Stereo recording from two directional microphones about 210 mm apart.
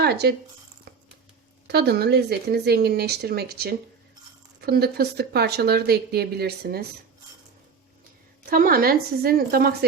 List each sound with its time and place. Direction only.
0.0 s speech: 50° right (ahead or behind)
1.6 s speech: 50° right (ahead or behind)
8.4 s speech: 45° right (ahead or behind)